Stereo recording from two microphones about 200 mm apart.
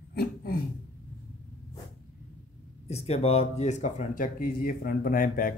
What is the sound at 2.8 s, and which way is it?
Speech, 30° left (ahead or behind).